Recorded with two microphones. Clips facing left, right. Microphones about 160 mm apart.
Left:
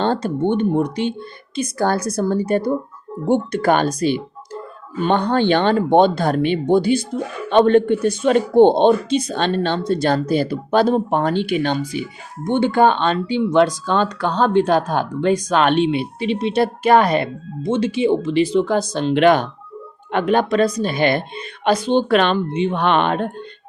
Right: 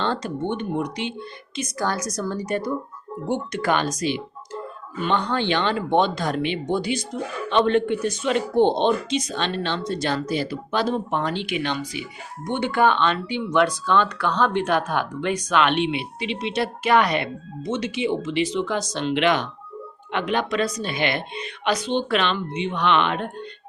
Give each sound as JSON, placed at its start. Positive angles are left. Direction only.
{"t": 0.0, "sound": "speech", "side_deg": 50}
{"t": 2.1, "sound": "a woman's voice", "side_deg": 55}
{"t": 4.9, "sound": "speech", "side_deg": 50}
{"t": 12.5, "sound": "speech", "side_deg": 30}